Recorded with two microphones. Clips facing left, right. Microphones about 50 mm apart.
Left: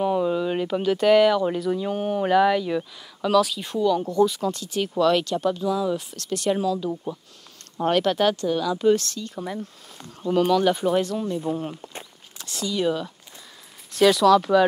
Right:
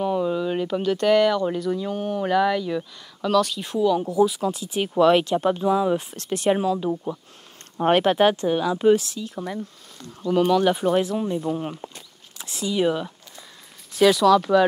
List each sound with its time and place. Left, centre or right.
0.0 s speech: centre
13.9 s speech: centre